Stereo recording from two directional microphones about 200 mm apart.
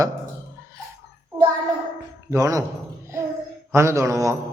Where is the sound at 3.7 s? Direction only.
15° right (ahead or behind).